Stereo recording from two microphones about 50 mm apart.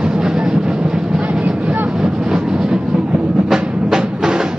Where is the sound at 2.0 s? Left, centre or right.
Centre.